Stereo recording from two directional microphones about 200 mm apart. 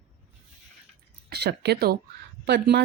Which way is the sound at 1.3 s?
55° right (ahead or behind).